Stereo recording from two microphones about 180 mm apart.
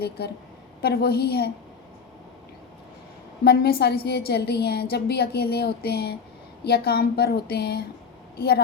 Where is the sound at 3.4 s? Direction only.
60° left (ahead or behind).